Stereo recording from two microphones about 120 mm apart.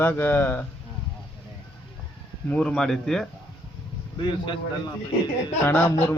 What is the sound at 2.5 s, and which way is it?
Speech, 5° left (ahead or behind).